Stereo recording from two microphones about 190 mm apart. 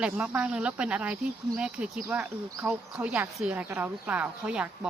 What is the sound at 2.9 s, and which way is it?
A woman's voice, 5° right (ahead or behind).